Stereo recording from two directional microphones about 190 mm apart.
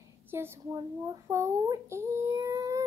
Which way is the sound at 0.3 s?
10° right (ahead or behind).